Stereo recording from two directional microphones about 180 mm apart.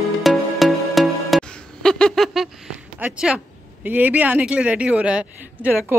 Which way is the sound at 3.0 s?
5° right (ahead or behind).